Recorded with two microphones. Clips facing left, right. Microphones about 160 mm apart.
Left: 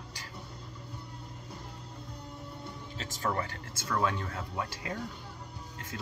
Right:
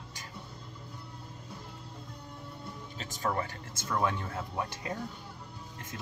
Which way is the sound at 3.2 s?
20° right (ahead or behind).